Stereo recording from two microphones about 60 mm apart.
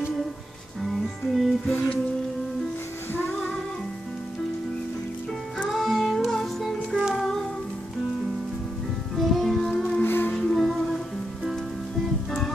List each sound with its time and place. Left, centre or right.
0.8 s music: centre
1.7 s music: left
3.1 s female singing: left
5.7 s music: centre
9.1 s music: centre
10.0 s music: left
10.3 s music: centre